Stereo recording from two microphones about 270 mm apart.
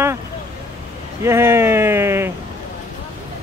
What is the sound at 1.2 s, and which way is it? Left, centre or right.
Speech, centre.